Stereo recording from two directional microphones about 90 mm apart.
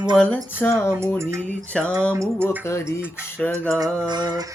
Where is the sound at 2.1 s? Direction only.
35° right (ahead or behind).